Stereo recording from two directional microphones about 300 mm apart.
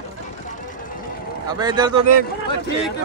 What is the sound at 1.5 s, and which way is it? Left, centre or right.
Speech, centre.